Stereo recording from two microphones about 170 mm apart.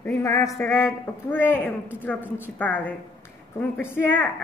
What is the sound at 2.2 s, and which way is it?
Speech, 10° right (ahead or behind).